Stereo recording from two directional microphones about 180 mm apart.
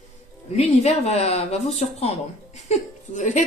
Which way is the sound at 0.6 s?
35° left (ahead or behind).